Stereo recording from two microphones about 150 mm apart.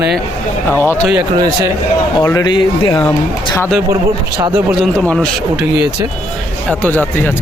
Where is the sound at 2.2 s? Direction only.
25° left (ahead or behind).